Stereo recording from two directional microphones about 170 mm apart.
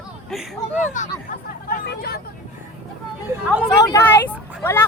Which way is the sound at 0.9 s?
50° left (ahead or behind).